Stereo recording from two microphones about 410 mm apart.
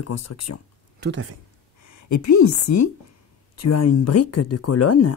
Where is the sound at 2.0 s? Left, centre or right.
Left.